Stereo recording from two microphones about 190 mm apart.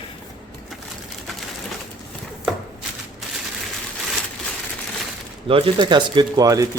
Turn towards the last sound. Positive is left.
turn(degrees=-20)  # may be behind; listen again after turning